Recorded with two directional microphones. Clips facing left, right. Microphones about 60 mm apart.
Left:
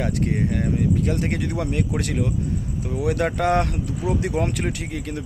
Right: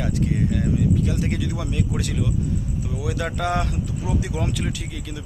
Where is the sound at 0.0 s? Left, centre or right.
Left.